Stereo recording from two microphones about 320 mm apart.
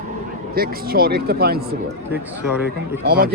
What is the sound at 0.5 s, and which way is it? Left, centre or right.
Speech, right.